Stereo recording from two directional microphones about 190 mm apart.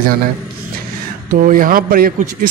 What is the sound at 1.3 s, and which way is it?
Speech, 45° right (ahead or behind).